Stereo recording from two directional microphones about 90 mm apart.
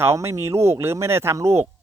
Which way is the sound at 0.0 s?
30° right (ahead or behind).